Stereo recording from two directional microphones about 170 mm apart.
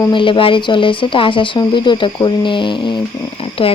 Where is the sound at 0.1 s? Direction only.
30° left (ahead or behind).